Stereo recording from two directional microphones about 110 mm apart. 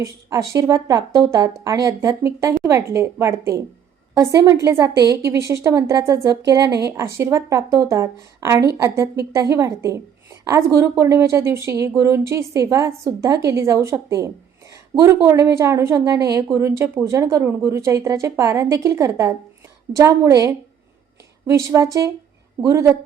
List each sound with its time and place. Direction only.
0.0 s a woman's voice: 30° right (ahead or behind)